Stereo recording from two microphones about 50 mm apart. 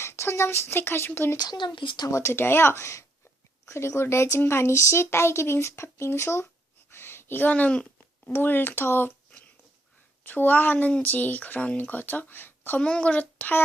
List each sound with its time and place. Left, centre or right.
0.0 s speech: left
2.0 s speech: left
2.3 s speech: left
6.9 s speech: left
10.2 s speech: left
12.8 s speech: left